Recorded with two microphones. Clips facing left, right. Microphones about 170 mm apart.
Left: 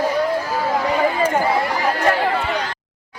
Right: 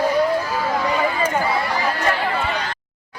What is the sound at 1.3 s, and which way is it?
Run, 50° left (ahead or behind).